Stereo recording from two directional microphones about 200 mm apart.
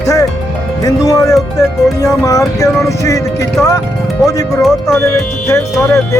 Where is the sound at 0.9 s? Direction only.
15° left (ahead or behind).